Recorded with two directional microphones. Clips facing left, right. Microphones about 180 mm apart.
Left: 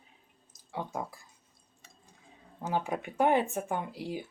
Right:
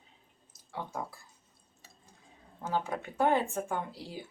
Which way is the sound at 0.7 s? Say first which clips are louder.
Left 2 dB; 15° left (ahead or behind).